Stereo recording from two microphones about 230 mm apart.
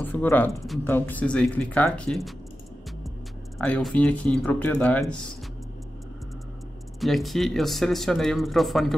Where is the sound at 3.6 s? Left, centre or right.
Centre.